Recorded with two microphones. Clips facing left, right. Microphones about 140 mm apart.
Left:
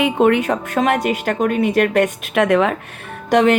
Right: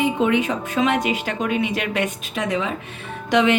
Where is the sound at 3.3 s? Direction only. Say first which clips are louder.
Left 4 dB; 45° left (ahead or behind).